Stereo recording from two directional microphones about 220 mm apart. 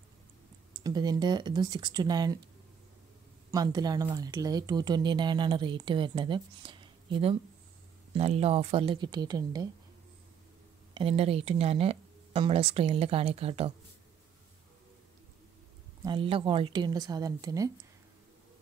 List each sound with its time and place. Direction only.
0.8 s speech: 20° right (ahead or behind)
3.5 s speech: 20° right (ahead or behind)
11.0 s speech: 25° right (ahead or behind)
16.0 s speech: 20° right (ahead or behind)